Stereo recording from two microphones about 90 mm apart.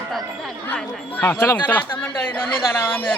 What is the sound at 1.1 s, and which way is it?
Speech, 25° left (ahead or behind).